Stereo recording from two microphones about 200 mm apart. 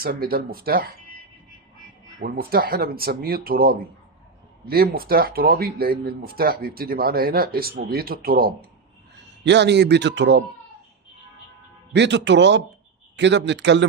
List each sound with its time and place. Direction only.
0.0 s speech: 50° right (ahead or behind)
2.2 s speech: 45° right (ahead or behind)
9.4 s speech: 60° right (ahead or behind)
11.9 s speech: 60° right (ahead or behind)